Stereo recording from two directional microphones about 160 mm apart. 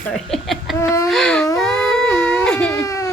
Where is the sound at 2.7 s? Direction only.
20° left (ahead or behind).